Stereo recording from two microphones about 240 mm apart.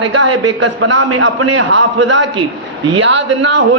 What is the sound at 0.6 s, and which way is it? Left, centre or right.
A man's voice, right.